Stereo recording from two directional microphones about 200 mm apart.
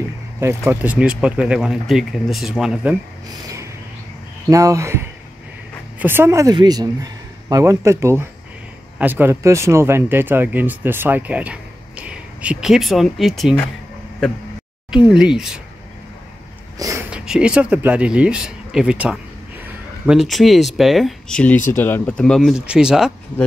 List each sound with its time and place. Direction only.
0.4 s speech: 10° right (ahead or behind)
3.4 s music: 15° right (ahead or behind)
4.5 s speech: 15° right (ahead or behind); by 13.7 s centre (ahead or behind)
14.9 s speech: 5° right (ahead or behind)
16.7 s a sound: 15° right (ahead or behind)
17.1 s speech: 5° right (ahead or behind)